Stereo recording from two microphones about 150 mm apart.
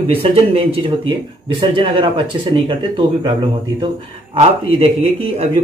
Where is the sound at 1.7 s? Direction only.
35° right (ahead or behind).